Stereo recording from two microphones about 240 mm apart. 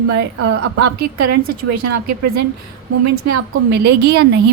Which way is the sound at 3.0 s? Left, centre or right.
Right.